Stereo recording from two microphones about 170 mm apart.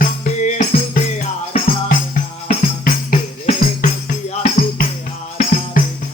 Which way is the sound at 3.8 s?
45° left (ahead or behind).